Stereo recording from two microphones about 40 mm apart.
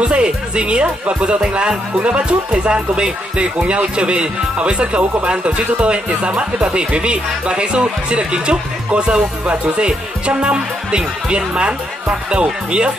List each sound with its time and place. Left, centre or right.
0.0 s speech: right